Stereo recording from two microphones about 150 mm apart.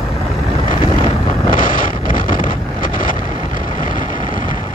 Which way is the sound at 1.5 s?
65° left (ahead or behind).